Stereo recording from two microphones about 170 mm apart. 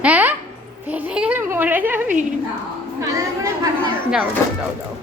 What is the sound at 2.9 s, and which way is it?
Chatter, 15° right (ahead or behind).